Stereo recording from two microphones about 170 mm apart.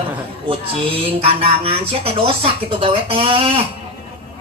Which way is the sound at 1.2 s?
35° right (ahead or behind).